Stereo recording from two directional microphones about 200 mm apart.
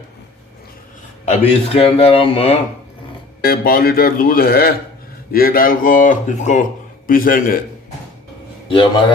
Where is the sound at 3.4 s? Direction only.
45° left (ahead or behind).